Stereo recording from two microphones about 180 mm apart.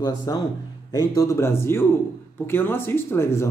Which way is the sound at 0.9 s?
20° left (ahead or behind).